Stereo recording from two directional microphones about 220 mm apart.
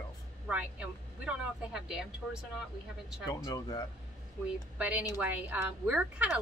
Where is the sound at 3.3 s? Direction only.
15° left (ahead or behind).